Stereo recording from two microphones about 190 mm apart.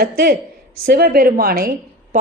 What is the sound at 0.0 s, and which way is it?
A woman's voice, 50° right (ahead or behind).